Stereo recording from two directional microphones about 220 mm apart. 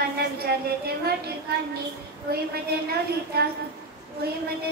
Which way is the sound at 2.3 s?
45° right (ahead or behind).